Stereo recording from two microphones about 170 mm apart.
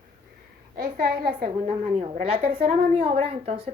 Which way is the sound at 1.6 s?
35° right (ahead or behind).